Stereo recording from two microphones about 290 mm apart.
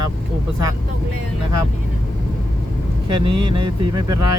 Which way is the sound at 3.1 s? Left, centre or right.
Centre.